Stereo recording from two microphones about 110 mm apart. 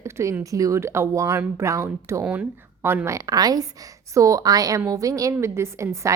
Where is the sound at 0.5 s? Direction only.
30° right (ahead or behind).